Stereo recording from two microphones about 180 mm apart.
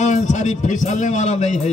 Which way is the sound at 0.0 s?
40° left (ahead or behind).